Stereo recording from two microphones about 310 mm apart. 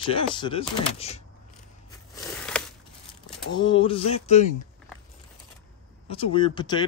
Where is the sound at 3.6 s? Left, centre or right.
Centre.